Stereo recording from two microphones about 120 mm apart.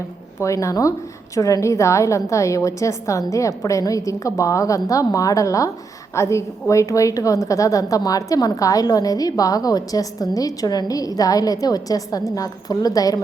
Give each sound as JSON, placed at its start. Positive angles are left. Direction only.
{"t": 0.3, "sound": "a woman's voice", "side_deg": 25}